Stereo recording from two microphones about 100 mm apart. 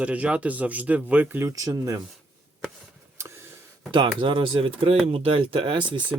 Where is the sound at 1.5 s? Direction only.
35° right (ahead or behind).